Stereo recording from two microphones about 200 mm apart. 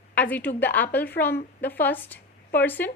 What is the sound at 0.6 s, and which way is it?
A woman's voice, 10° left (ahead or behind).